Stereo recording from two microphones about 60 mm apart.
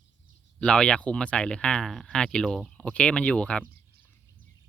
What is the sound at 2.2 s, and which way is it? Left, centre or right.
Speech, centre.